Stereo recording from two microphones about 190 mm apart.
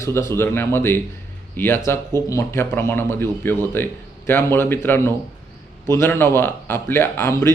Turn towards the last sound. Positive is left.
turn(degrees=15)  # may be behind; listen again after turning